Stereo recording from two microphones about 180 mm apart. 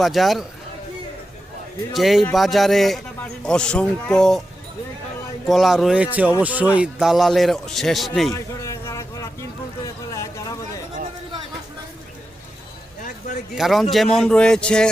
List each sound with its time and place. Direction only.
0.0 s a man's voice: centre (ahead or behind)
1.9 s a man's voice: centre (ahead or behind)
5.5 s a man's voice: centre (ahead or behind)
8.3 s a sound: 15° left (ahead or behind)
13.6 s a man's voice: centre (ahead or behind)